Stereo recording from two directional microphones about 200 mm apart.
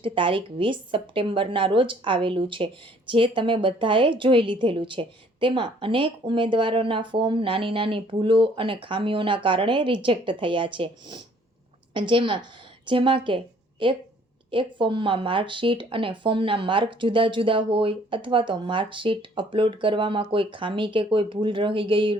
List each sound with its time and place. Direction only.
0.0 s a woman's voice: 25° right (ahead or behind)